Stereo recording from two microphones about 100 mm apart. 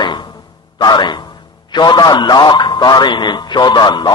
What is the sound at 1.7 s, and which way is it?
A man's voice, 45° left (ahead or behind).